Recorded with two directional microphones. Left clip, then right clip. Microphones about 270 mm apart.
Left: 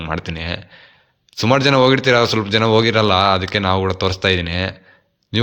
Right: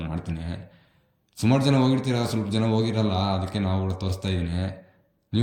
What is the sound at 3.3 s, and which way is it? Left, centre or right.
Speech, centre.